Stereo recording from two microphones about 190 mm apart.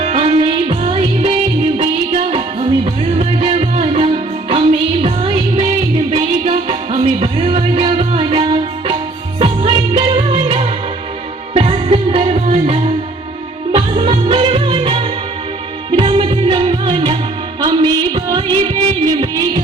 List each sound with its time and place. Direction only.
0.0 s music: 30° right (ahead or behind)